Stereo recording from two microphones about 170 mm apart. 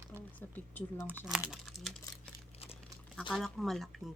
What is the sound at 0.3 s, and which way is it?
Speech, 10° left (ahead or behind).